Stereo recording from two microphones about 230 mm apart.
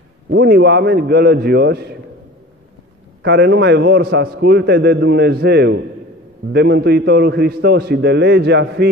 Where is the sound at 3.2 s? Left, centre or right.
Right.